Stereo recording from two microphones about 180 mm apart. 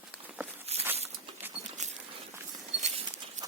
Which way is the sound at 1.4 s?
10° right (ahead or behind).